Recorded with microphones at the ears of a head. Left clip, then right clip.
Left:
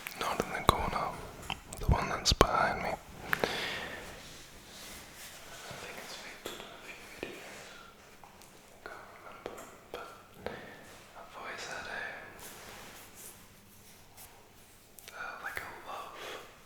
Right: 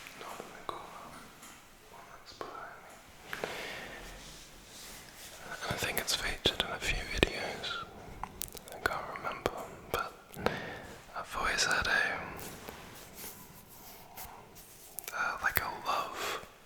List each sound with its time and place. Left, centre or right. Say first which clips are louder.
0.2 s whispering: left 13 dB; left
5.5 s whispering: right 11 dB; right
15.0 s whispering: right 8 dB; right